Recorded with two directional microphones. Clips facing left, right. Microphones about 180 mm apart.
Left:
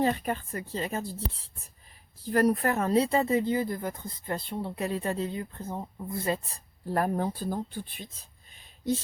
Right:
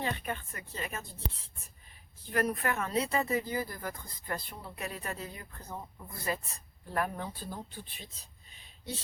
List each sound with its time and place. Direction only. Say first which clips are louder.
0.0 s speech: left 8 dB; 40° left (ahead or behind)
2.2 s speech: left 7 dB; 35° left (ahead or behind); by 8.3 s 55° left (ahead or behind)